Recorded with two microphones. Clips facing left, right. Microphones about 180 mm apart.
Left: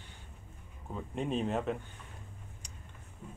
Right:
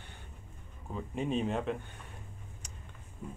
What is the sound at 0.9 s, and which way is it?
Speech, centre (ahead or behind).